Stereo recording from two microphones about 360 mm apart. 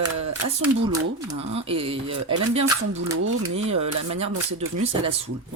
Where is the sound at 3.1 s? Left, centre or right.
Right.